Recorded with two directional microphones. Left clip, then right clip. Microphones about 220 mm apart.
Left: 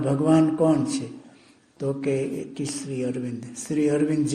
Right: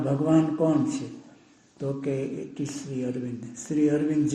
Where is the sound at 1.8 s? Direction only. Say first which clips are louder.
Left 4 dB; 35° left (ahead or behind).